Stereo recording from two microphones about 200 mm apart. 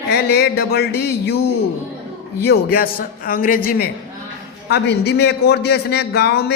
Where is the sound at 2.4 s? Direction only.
50° left (ahead or behind).